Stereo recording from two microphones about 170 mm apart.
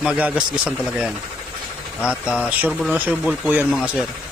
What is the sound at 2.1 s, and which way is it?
Speech, 5° right (ahead or behind).